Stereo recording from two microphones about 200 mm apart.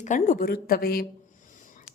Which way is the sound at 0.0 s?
40° left (ahead or behind).